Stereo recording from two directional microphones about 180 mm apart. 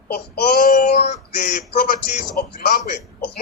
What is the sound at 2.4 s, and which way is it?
Speech, 50° left (ahead or behind).